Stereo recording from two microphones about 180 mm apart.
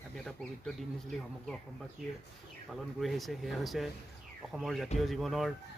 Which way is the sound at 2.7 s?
Centre (ahead or behind).